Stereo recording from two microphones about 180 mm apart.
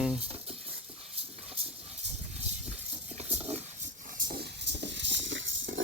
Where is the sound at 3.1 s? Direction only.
35° right (ahead or behind).